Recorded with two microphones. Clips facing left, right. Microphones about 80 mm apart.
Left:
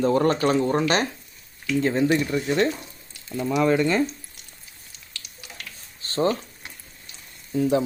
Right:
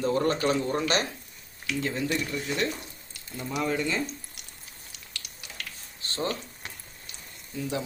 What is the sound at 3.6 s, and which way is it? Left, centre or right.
Speech, left.